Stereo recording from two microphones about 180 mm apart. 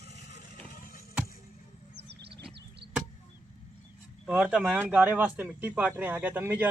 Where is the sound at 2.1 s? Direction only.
65° right (ahead or behind).